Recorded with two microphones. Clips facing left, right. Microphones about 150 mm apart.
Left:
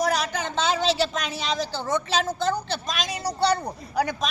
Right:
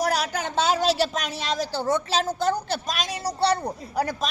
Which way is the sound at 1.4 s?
Centre (ahead or behind).